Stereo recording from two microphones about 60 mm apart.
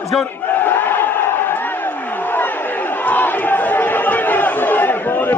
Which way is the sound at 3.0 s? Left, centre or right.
Left.